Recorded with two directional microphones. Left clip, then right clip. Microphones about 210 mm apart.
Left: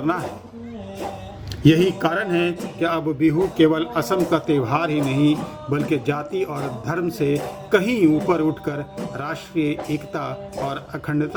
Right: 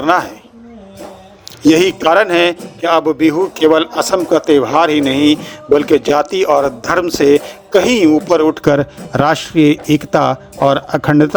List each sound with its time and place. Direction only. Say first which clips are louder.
1.6 s speech: right 8 dB; 45° right (ahead or behind)